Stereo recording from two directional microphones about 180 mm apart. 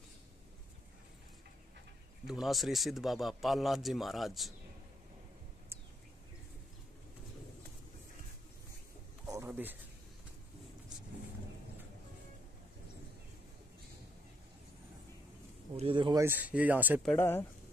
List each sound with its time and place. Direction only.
2.2 s a man's voice: centre (ahead or behind)
9.2 s a sound: 20° right (ahead or behind)
9.5 s speech: 10° right (ahead or behind)
15.7 s a man's voice: 30° right (ahead or behind)
16.3 s speech: 10° right (ahead or behind)
17.0 s speech: 10° left (ahead or behind)